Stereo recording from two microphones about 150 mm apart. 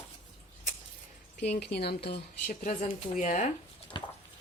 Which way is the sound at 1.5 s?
90° left.